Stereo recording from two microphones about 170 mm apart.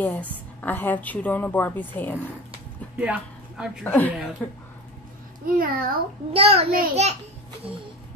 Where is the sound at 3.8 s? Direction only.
10° left (ahead or behind).